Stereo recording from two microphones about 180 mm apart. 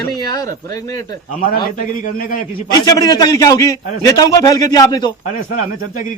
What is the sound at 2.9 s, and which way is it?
A man's voice, 20° left (ahead or behind).